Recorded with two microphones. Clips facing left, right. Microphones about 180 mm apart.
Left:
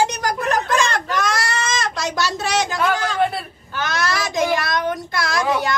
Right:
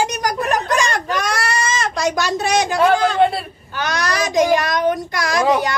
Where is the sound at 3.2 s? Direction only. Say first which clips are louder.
Right 3 dB; 25° right (ahead or behind).